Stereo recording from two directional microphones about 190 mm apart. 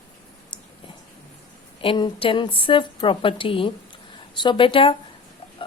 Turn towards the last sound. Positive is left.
turn(degrees=25)  # may be behind; listen again after turning